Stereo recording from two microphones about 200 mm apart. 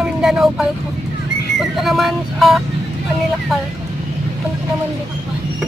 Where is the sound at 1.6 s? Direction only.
Centre (ahead or behind).